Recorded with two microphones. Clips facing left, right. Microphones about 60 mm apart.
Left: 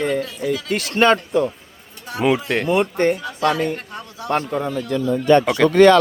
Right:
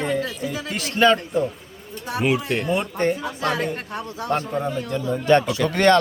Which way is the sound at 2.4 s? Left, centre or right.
Left.